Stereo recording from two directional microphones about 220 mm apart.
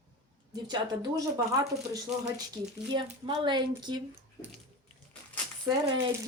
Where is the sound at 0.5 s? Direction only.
20° right (ahead or behind).